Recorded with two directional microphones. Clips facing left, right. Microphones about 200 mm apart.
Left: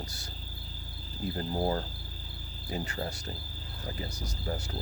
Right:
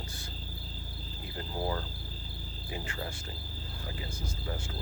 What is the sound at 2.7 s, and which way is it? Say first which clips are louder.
Speech: left 4 dB; 40° left (ahead or behind).